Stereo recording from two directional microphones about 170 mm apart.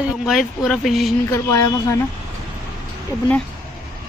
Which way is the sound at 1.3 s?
20° left (ahead or behind).